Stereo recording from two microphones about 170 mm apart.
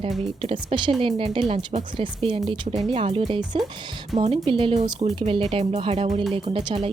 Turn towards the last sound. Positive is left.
turn(degrees=-30)  # may be behind; listen again after turning